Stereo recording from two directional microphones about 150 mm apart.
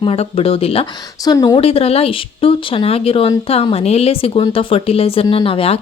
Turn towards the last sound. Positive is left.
turn(degrees=40)  # may be behind; listen again after turning